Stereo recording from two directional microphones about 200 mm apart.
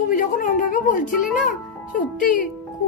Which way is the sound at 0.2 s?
40° left (ahead or behind).